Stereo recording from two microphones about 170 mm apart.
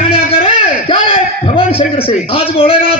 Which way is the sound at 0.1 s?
35° left (ahead or behind).